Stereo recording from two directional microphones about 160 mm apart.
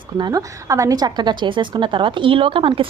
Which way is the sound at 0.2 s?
25° right (ahead or behind).